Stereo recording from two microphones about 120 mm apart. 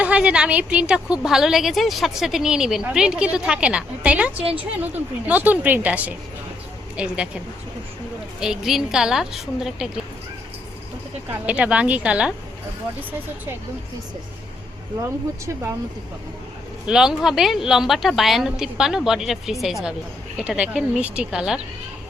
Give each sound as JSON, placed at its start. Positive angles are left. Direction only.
{"t": 0.0, "sound": "a woman's voice", "side_deg": -10}
{"t": 8.4, "sound": "a woman's voice", "side_deg": -5}
{"t": 11.3, "sound": "a woman's voice", "side_deg": -10}
{"t": 15.0, "sound": "speech", "side_deg": -25}
{"t": 16.8, "sound": "a woman's voice", "side_deg": -5}